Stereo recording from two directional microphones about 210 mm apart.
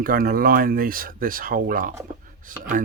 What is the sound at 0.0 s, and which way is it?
Speech, 45° right (ahead or behind).